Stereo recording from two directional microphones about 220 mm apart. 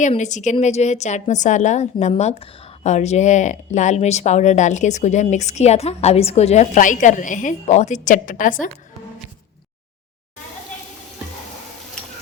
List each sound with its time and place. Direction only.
0.0 s speech: 35° left (ahead or behind)